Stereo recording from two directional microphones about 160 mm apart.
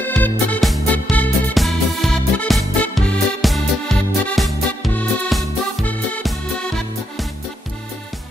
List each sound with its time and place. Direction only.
0.0 s music: 10° left (ahead or behind)